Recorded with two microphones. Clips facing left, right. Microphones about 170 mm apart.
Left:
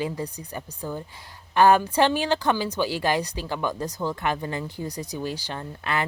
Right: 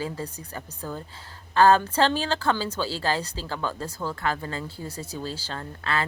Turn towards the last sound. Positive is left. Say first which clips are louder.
# left 1 dB
turn(degrees=15)  # may be behind; listen again after turning